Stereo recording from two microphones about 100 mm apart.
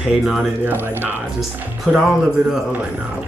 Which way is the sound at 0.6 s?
20° right (ahead or behind).